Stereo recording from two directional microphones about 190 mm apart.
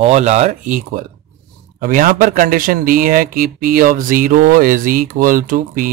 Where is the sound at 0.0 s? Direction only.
35° right (ahead or behind).